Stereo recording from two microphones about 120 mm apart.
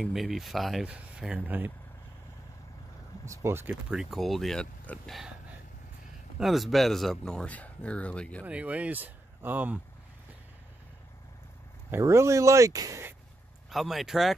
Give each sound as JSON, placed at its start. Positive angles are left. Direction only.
{"t": 0.0, "sound": "speech", "side_deg": 0}
{"t": 3.3, "sound": "speech", "side_deg": -20}
{"t": 3.9, "sound": "speech", "side_deg": 0}
{"t": 6.4, "sound": "speech", "side_deg": 0}
{"t": 8.5, "sound": "speech", "side_deg": -10}
{"t": 11.9, "sound": "speech", "side_deg": -25}
{"t": 13.7, "sound": "speech", "side_deg": 0}